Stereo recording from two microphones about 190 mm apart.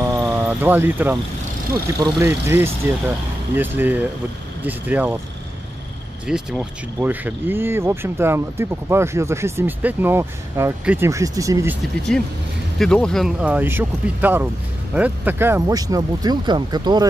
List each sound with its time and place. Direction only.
0.0 s a sound: 10° right (ahead or behind)
2.0 s speech: 15° right (ahead or behind)
6.2 s speech: 5° right (ahead or behind)
12.7 s speech: 5° left (ahead or behind); by 17.1 s 20° right (ahead or behind)